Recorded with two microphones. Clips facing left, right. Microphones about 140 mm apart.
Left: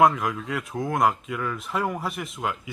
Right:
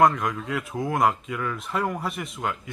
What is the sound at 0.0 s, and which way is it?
Speech, centre (ahead or behind).